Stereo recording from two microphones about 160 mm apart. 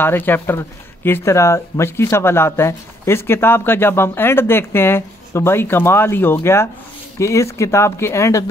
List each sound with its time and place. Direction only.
0.0 s speech: 10° left (ahead or behind)